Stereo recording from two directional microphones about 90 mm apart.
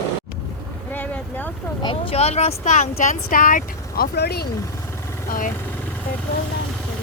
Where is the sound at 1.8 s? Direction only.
75° left (ahead or behind).